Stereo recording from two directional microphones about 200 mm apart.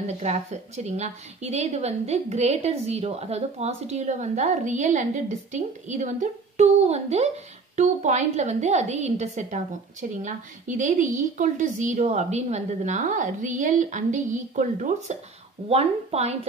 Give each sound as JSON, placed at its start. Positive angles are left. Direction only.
{"t": 0.0, "sound": "a woman's voice", "side_deg": -35}